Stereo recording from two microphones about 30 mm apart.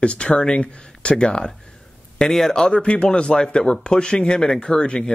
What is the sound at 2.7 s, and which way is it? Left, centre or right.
Speech, left.